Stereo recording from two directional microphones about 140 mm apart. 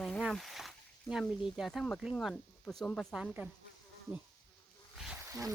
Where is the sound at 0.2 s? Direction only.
Centre (ahead or behind).